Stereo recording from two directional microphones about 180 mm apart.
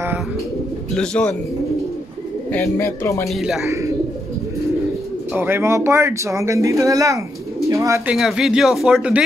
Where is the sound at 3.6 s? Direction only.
15° right (ahead or behind).